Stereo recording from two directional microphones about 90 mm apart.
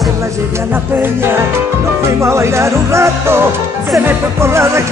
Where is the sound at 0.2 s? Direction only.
25° right (ahead or behind).